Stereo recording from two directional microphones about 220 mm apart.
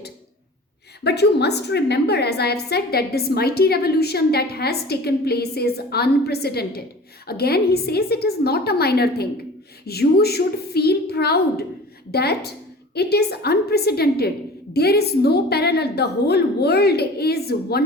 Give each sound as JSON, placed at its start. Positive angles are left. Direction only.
{"t": 1.0, "sound": "a woman's voice", "side_deg": 50}